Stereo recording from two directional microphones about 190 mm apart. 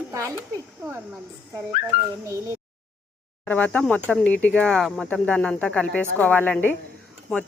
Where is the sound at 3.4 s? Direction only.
5° left (ahead or behind).